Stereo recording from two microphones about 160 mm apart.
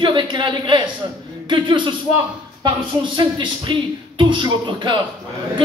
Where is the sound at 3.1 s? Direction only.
30° right (ahead or behind).